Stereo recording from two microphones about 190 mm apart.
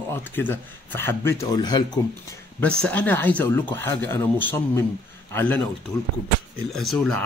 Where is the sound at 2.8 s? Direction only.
10° left (ahead or behind).